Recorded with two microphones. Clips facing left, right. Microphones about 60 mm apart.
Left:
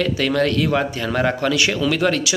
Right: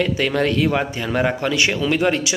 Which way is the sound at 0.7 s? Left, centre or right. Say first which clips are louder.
Left 1 dB; centre.